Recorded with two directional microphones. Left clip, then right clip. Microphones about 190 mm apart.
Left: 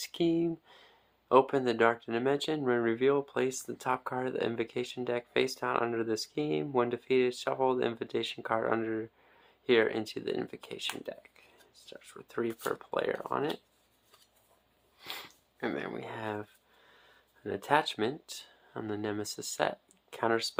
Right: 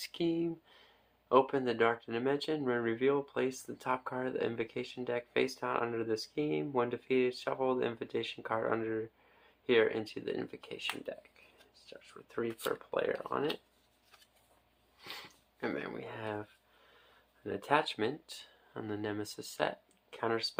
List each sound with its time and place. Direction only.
0.0 s speech: 35° left (ahead or behind)
11.9 s speech: 35° left (ahead or behind)
15.0 s speech: 35° left (ahead or behind)